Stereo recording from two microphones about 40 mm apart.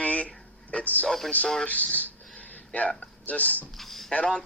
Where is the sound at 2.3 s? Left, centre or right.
Left.